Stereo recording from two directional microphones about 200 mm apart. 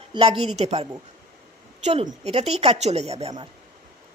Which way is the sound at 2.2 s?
30° right (ahead or behind).